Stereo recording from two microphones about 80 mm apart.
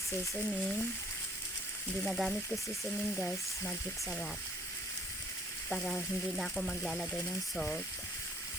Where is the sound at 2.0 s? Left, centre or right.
Centre.